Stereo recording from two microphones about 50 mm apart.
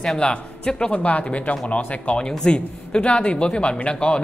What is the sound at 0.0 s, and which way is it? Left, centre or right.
Speech, centre.